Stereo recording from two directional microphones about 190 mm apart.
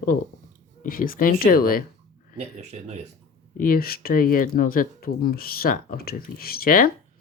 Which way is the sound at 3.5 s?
50° left (ahead or behind).